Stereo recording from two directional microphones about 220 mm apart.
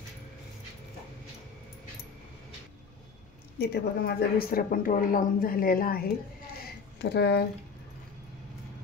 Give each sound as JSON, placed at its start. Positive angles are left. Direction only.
{"t": 3.5, "sound": "a woman's voice", "side_deg": 45}